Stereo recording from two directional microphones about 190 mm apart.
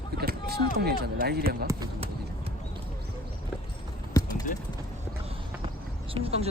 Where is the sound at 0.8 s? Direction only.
55° right (ahead or behind).